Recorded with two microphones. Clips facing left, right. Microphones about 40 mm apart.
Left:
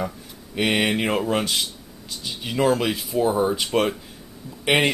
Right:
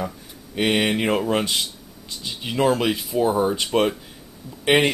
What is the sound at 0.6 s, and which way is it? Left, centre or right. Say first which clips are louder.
Speech: right 1 dB; centre.